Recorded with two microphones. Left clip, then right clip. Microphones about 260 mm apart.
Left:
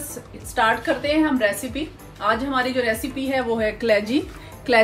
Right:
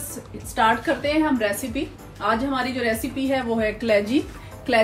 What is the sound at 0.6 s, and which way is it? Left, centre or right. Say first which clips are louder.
A woman's voice: even; left.